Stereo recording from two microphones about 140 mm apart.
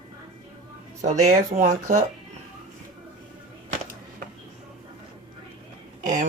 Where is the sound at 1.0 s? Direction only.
55° right (ahead or behind).